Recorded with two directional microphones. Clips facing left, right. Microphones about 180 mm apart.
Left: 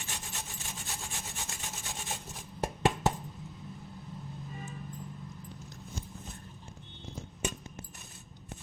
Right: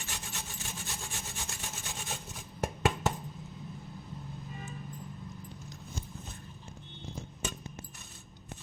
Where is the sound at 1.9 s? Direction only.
Centre (ahead or behind).